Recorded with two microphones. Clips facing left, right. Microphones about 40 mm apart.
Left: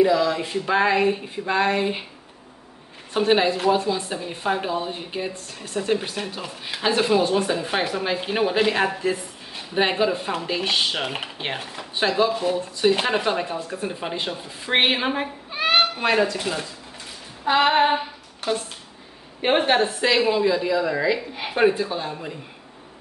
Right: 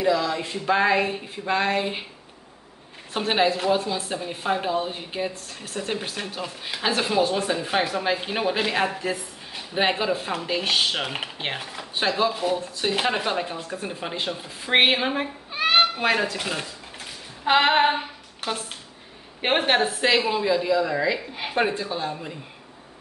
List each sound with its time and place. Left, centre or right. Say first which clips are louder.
0.0 s speech: left 4 dB; centre
3.1 s a woman's voice: left 3 dB; centre
15.0 s cat: left 1 dB; centre
16.0 s a woman's voice: left 2 dB; centre
19.4 s a woman's voice: left 2 dB; centre
20.4 s speech: left 1 dB; centre